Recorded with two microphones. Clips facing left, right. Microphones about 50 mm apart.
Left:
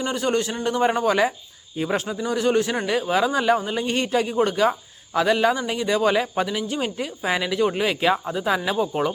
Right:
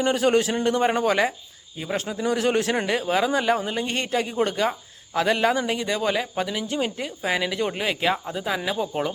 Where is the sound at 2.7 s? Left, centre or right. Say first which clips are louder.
Left 1 dB; centre.